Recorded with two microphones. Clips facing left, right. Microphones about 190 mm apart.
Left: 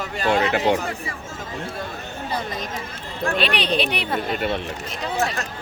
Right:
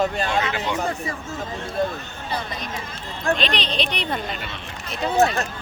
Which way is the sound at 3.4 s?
10° left (ahead or behind).